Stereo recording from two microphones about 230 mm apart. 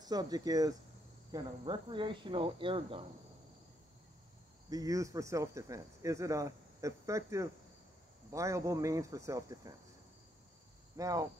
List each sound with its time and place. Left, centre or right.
0.0 s speech: centre
4.6 s speech: centre
11.0 s speech: centre